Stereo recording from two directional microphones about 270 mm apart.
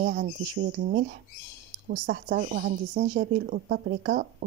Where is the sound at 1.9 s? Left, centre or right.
Right.